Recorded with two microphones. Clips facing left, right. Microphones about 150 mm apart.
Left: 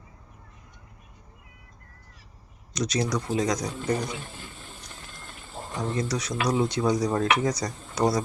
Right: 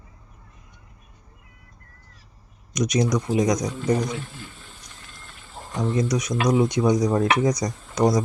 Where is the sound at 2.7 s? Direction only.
15° right (ahead or behind).